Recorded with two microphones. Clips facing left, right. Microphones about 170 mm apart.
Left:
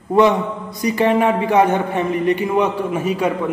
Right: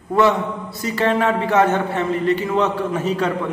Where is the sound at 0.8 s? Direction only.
15° left (ahead or behind).